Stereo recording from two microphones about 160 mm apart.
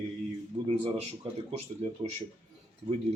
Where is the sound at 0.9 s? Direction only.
35° right (ahead or behind).